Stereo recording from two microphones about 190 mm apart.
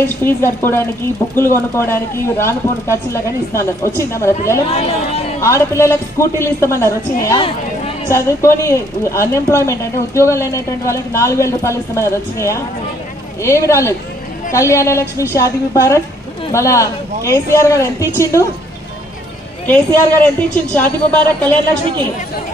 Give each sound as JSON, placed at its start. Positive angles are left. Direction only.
{"t": 0.0, "sound": "a woman's voice", "side_deg": 10}
{"t": 4.7, "sound": "speech", "side_deg": 30}
{"t": 5.4, "sound": "a woman's voice", "side_deg": 15}
{"t": 19.6, "sound": "a woman's voice", "side_deg": 10}